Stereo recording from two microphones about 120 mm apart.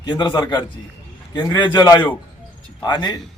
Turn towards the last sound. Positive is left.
turn(degrees=35)  # may be behind; listen again after turning